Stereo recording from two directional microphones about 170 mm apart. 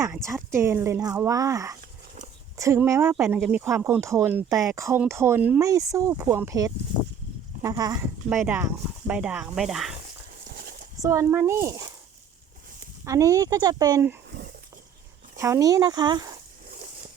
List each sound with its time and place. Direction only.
0.0 s speech: 15° right (ahead or behind)
10.6 s horse: 55° right (ahead or behind)
11.0 s speech: 15° right (ahead or behind)
13.1 s speech: 20° right (ahead or behind)
15.4 s speech: 20° right (ahead or behind)